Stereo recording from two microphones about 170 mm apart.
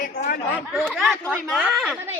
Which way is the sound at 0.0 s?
55° left (ahead or behind).